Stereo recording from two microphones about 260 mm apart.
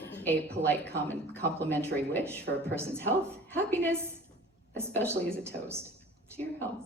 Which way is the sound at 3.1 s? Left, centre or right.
Centre.